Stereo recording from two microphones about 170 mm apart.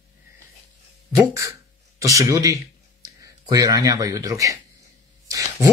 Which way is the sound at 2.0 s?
20° right (ahead or behind).